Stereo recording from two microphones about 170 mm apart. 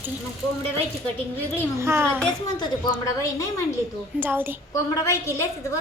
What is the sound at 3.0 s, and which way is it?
Speech, 20° left (ahead or behind).